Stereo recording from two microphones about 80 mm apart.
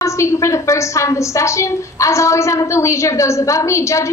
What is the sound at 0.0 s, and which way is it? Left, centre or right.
A woman's voice, left.